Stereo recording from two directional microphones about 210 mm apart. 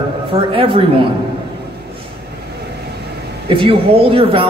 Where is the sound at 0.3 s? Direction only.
25° right (ahead or behind).